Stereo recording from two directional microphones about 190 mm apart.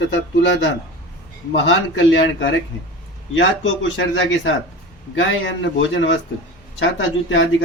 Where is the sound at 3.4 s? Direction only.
80° left.